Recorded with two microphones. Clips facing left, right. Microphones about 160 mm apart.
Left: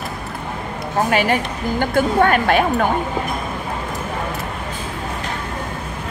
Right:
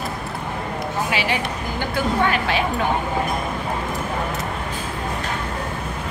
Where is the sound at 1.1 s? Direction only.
50° left (ahead or behind).